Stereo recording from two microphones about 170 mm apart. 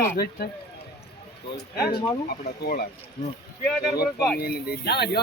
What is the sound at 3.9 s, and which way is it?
Speech, 65° left (ahead or behind).